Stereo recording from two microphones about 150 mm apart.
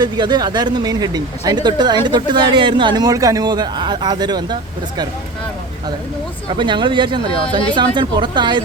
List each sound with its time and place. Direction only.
0.0 s speech: 30° right (ahead or behind)
6.5 s speech: 30° right (ahead or behind)